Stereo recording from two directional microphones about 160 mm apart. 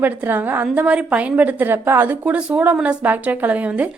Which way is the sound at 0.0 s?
10° right (ahead or behind).